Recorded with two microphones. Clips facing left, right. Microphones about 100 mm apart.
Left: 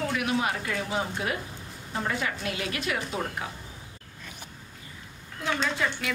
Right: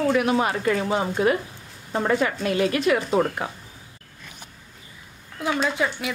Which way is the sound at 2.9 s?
50° right (ahead or behind).